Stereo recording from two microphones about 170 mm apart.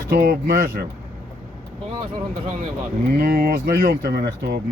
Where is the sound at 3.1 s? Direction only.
65° right (ahead or behind).